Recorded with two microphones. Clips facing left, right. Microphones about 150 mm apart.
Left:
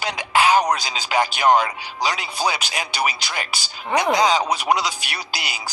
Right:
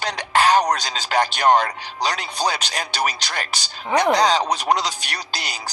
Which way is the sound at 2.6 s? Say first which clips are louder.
Even; 10° left (ahead or behind).